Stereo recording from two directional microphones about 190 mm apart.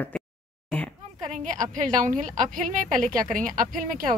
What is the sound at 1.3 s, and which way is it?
A woman's voice, 40° right (ahead or behind).